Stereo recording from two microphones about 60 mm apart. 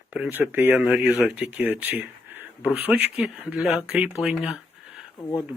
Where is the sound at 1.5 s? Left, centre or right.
Right.